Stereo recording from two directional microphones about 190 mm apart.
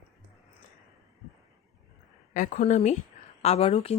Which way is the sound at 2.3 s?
45° left (ahead or behind).